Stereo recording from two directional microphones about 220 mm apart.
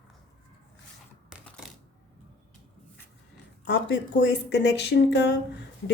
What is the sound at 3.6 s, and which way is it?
Speech, 50° left (ahead or behind).